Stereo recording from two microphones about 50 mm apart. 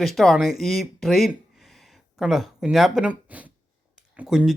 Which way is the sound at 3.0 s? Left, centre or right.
Right.